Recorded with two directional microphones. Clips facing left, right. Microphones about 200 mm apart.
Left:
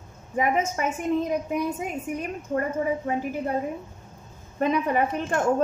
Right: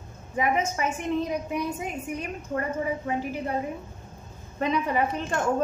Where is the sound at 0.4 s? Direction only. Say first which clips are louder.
Left 1 dB; 50° left (ahead or behind).